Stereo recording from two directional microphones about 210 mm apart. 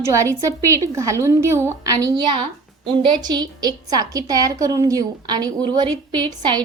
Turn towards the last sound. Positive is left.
turn(degrees=-20)  # may be behind; listen again after turning